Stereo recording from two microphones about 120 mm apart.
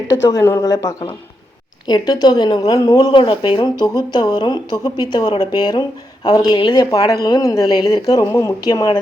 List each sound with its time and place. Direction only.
0.1 s speech: 30° left (ahead or behind)